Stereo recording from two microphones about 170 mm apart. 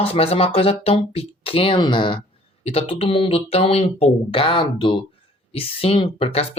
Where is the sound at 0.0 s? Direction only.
35° left (ahead or behind).